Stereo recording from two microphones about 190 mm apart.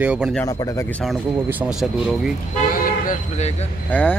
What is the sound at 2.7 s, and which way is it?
Vehicle, 45° left (ahead or behind).